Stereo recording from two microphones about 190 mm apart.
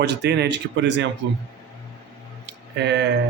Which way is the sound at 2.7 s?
65° right (ahead or behind).